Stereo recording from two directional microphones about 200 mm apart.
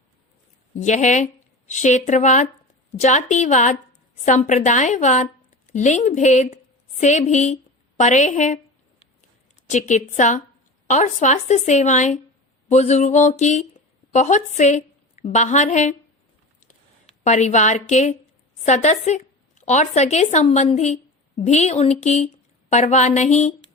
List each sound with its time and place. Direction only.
0.8 s a woman's voice: 35° left (ahead or behind)
9.6 s speech: 35° left (ahead or behind)
17.2 s a woman's voice: 35° left (ahead or behind)